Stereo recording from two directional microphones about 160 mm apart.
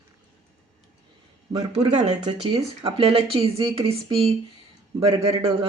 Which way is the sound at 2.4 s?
30° right (ahead or behind).